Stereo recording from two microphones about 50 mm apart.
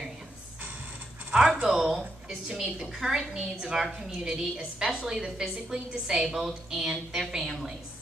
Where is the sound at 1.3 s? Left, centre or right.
Centre.